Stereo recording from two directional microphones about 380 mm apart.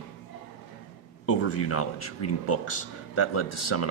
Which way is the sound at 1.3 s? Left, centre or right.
Left.